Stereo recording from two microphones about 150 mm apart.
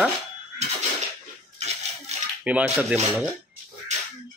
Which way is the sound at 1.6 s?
45° right (ahead or behind).